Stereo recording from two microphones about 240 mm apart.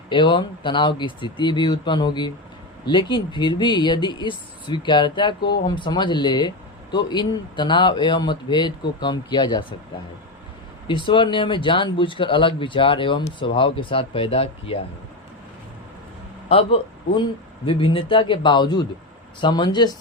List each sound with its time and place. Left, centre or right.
0.1 s speech: centre
10.8 s speech: centre
16.5 s a man's voice: left